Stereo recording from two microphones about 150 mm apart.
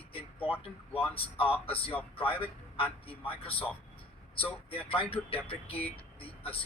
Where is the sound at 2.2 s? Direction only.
40° left (ahead or behind).